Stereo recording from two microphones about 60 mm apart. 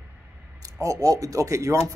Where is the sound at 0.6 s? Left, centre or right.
Right.